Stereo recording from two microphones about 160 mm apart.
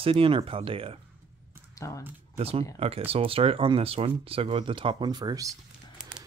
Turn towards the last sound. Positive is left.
turn(degrees=-20)  # may be behind; listen again after turning